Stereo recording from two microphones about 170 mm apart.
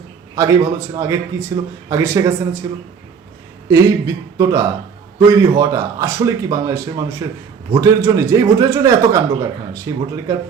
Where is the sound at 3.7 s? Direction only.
20° right (ahead or behind).